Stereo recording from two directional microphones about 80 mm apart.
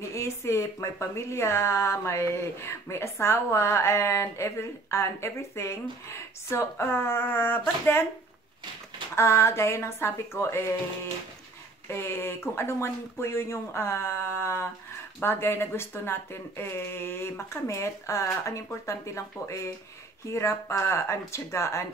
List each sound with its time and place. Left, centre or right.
0.1 s speech: left
9.1 s speech: left
11.9 s speech: left